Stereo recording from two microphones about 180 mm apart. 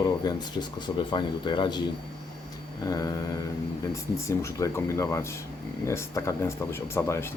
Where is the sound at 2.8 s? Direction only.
20° left (ahead or behind).